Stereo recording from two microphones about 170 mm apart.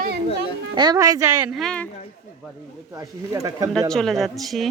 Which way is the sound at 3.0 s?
20° right (ahead or behind).